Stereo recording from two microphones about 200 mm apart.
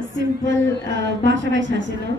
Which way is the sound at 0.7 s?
70° right (ahead or behind).